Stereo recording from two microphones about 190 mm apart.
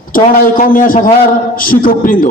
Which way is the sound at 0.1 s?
45° left (ahead or behind).